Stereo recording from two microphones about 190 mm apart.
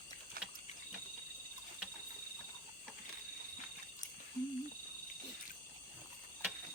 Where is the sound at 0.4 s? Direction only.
50° right (ahead or behind).